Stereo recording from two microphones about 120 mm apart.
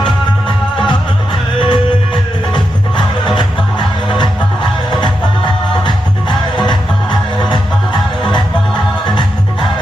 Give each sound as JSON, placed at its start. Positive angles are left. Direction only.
{"t": 1.5, "sound": "music", "side_deg": 40}
{"t": 3.2, "sound": "music", "side_deg": 40}